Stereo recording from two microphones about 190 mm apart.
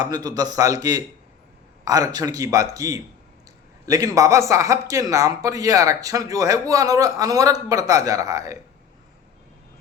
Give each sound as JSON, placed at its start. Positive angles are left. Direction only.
{"t": 0.0, "sound": "a man's voice", "side_deg": -20}